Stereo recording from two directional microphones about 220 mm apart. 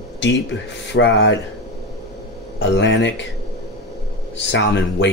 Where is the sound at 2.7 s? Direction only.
55° left (ahead or behind).